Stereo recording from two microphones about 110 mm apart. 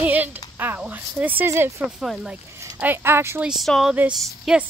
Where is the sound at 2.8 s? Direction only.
20° right (ahead or behind).